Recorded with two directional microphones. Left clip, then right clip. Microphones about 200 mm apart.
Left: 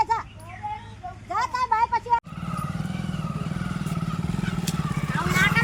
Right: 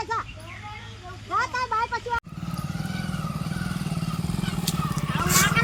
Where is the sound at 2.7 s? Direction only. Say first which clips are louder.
Right 1 dB; centre (ahead or behind).